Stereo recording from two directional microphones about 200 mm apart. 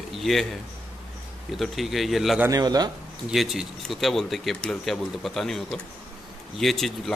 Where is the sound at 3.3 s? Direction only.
Centre (ahead or behind).